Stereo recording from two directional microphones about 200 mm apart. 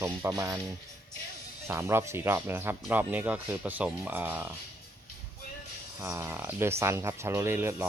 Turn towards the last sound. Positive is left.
turn(degrees=-10)  # may be behind; listen again after turning